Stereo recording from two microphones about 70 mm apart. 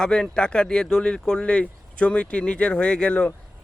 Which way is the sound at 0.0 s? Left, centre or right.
Centre.